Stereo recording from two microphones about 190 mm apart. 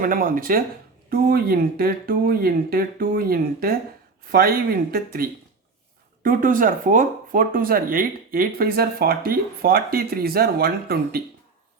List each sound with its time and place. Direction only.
0.0 s speech: 50° right (ahead or behind)